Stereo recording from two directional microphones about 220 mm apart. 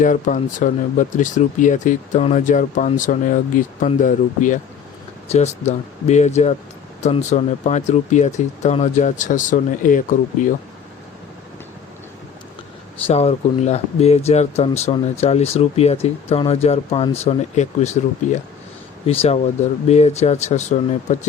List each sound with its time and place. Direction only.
0.0 s speech: 35° left (ahead or behind)
13.1 s speech: 30° left (ahead or behind)